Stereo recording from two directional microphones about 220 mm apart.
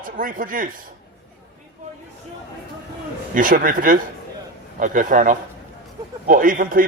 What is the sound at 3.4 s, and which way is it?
Speech, 35° right (ahead or behind).